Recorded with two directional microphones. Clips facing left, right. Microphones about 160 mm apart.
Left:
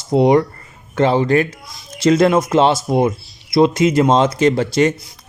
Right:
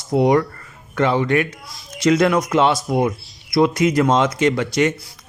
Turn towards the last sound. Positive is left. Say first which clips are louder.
# left 3 dB
turn(degrees=30)  # may be behind; listen again after turning